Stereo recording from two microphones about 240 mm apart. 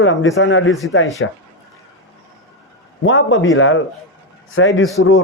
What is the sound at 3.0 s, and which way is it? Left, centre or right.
A man's voice, left.